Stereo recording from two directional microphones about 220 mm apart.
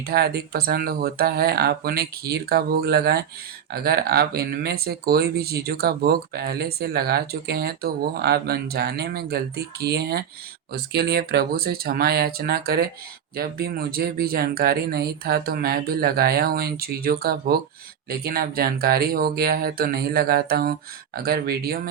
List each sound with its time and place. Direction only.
0.0 s speech: 45° right (ahead or behind)